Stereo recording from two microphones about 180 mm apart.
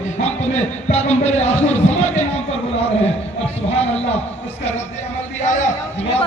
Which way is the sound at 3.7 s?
35° left (ahead or behind).